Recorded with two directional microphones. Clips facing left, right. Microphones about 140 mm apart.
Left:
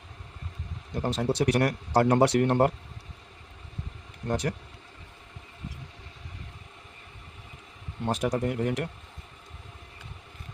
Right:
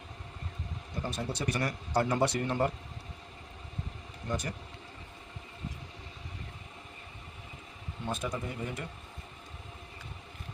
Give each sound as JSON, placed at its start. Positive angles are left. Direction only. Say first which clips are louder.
{"t": 1.0, "sound": "speech", "louder": "left 9 dB", "side_deg": 75}
{"t": 4.3, "sound": "speech", "louder": "left 7 dB", "side_deg": 85}
{"t": 8.0, "sound": "speech", "louder": "left 8 dB", "side_deg": 90}